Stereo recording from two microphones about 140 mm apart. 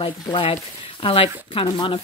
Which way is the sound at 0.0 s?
40° left (ahead or behind).